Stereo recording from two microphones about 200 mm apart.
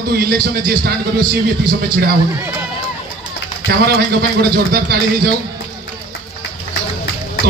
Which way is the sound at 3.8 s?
50° right (ahead or behind).